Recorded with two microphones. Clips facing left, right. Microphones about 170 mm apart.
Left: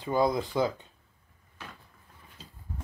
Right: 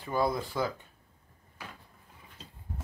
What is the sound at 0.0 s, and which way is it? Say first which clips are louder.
Speech: left 3 dB; 20° left (ahead or behind).